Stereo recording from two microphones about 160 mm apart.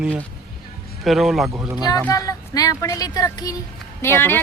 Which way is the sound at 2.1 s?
20° left (ahead or behind).